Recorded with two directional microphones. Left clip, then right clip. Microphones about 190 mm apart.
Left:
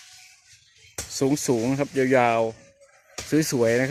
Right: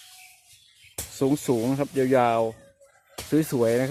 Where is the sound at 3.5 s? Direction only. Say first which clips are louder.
Left 2 dB; 5° left (ahead or behind).